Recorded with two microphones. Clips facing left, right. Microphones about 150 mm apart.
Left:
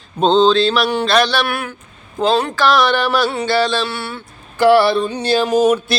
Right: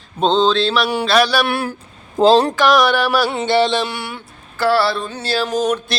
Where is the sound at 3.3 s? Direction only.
20° right (ahead or behind).